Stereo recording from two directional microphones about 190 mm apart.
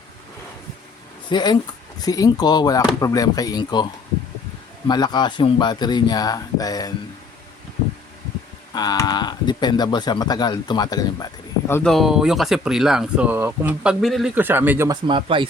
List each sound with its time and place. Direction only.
1.3 s speech: 20° left (ahead or behind)
4.9 s speech: 20° left (ahead or behind)
8.7 s speech: 20° left (ahead or behind)
11.7 s speech: 5° left (ahead or behind)
14.8 s speech: 25° right (ahead or behind)